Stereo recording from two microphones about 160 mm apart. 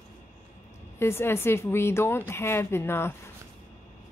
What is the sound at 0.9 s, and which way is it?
A woman's voice, 15° left (ahead or behind).